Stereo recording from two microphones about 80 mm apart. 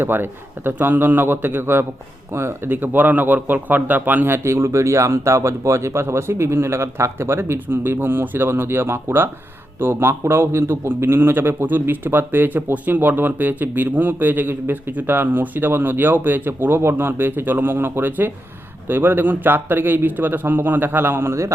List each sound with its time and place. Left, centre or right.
0.0 s a man's voice: right
4.4 s a man's voice: right